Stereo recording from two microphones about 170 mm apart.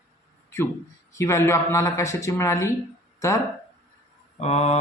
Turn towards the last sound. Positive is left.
turn(degrees=40)  # may be behind; listen again after turning